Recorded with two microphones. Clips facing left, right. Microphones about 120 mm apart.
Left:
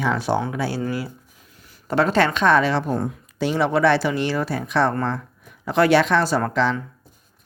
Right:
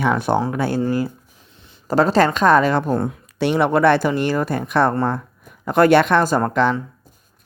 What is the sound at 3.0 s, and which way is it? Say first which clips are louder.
Speech: right 3 dB; 70° right (ahead or behind).